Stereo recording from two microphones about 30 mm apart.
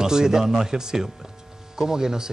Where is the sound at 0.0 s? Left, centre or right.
Right.